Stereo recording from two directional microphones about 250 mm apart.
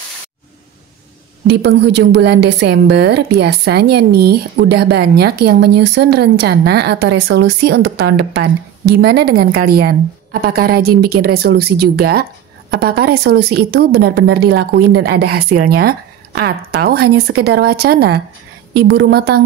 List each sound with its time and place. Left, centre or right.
1.6 s a woman's voice: right